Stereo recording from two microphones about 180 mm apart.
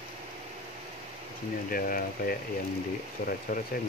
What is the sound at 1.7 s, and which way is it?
Speech, 50° left (ahead or behind).